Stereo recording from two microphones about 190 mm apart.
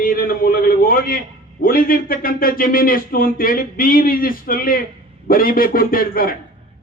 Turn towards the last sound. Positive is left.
turn(degrees=50)  # may be behind; listen again after turning